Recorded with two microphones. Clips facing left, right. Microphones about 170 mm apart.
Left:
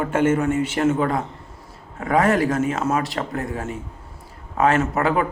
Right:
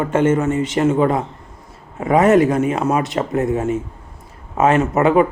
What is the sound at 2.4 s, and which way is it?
Speech, 20° right (ahead or behind).